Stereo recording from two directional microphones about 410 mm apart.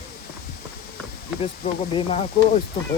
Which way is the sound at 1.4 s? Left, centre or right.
Centre.